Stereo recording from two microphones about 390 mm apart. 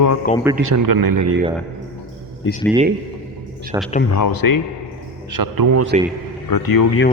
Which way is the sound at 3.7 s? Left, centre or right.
Centre.